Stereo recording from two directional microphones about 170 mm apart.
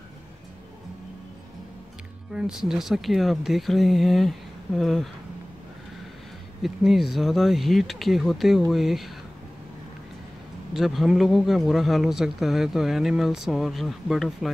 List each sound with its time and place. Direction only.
2.3 s a man's voice: 5° right (ahead or behind)
6.6 s a man's voice: centre (ahead or behind)
10.7 s a man's voice: centre (ahead or behind)